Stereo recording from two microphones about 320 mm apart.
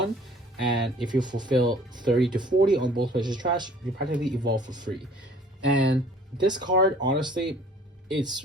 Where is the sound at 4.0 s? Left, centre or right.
Right.